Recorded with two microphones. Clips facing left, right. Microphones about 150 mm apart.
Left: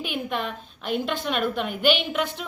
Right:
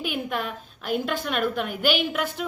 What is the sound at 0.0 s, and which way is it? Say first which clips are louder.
A woman's voice: even; 5° right (ahead or behind).